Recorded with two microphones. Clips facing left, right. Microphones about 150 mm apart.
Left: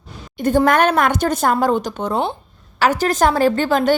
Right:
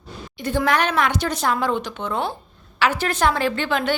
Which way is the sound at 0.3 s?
45° left (ahead or behind).